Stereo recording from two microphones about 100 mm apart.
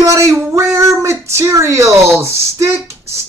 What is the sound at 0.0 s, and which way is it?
A man's voice, 30° right (ahead or behind).